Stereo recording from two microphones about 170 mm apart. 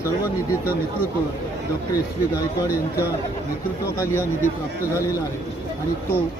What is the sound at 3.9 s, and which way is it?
Speech, 15° left (ahead or behind).